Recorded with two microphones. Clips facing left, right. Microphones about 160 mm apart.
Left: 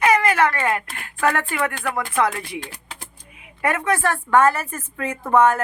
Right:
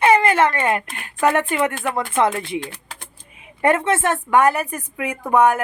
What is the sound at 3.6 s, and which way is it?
A woman's voice, 25° right (ahead or behind).